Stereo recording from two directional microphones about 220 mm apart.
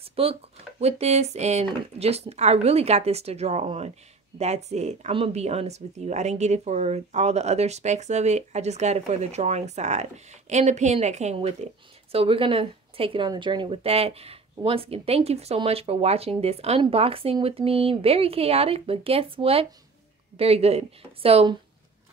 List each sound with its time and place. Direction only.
0.0 s a woman's voice: 25° right (ahead or behind)